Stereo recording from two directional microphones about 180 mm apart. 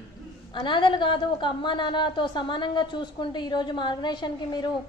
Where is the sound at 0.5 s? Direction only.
25° left (ahead or behind).